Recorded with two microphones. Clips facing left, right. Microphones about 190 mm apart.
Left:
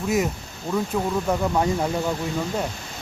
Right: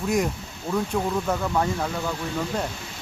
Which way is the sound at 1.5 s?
20° left (ahead or behind).